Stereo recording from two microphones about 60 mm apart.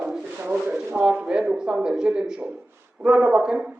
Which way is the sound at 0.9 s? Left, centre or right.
Centre.